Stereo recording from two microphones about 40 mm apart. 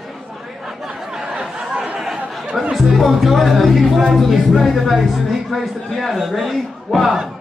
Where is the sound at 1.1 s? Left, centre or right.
Centre.